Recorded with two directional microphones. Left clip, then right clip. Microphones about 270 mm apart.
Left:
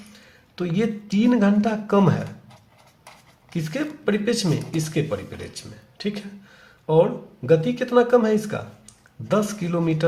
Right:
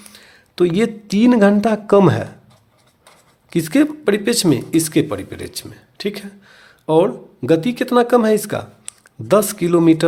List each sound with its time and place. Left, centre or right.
0.1 s speech: right
3.5 s speech: right